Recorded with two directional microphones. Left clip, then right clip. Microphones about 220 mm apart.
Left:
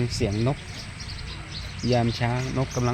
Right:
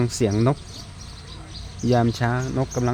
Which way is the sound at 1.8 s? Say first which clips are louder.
Right 3 dB; 35° right (ahead or behind).